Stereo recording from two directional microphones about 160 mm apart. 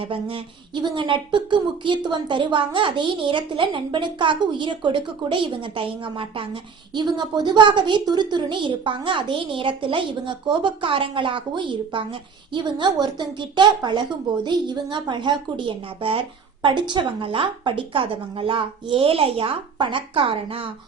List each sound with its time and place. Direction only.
0.0 s a woman's voice: 35° right (ahead or behind)